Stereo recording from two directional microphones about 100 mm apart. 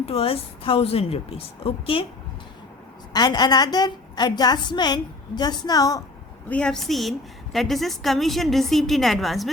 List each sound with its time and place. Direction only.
0.0 s a woman's voice: 80° left
3.1 s a woman's voice: 45° left (ahead or behind)
6.5 s a woman's voice: 10° left (ahead or behind)